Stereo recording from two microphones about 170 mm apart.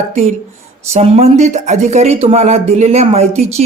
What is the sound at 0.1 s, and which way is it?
Speech, 45° right (ahead or behind).